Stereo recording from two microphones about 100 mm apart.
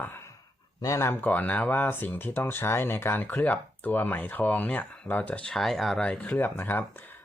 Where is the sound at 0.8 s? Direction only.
30° left (ahead or behind).